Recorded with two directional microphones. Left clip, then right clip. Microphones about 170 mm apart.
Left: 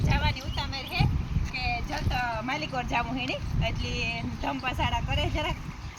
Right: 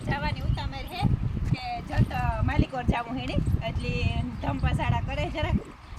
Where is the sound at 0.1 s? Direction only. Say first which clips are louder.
Even; 10° right (ahead or behind).